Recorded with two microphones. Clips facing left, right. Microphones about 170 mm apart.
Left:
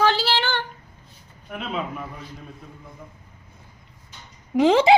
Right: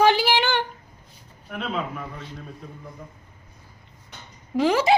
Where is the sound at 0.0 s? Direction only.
15° right (ahead or behind).